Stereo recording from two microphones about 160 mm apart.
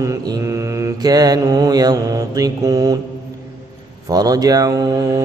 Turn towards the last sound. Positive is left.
turn(degrees=-25)  # may be behind; listen again after turning